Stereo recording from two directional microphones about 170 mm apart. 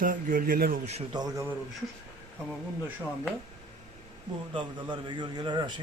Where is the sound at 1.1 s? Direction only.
25° right (ahead or behind).